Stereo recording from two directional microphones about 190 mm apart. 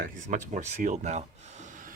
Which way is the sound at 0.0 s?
45° right (ahead or behind).